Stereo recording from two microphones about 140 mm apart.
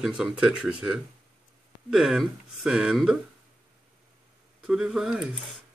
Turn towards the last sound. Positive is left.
turn(degrees=-5)  # may be behind; listen again after turning